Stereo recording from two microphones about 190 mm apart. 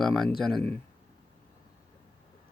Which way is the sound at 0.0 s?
Centre (ahead or behind).